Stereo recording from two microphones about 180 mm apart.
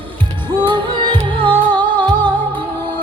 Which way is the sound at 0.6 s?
25° right (ahead or behind).